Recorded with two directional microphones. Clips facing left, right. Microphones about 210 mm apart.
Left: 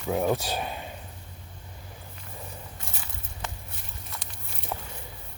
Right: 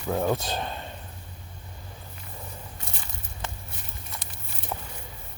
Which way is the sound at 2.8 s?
Centre (ahead or behind).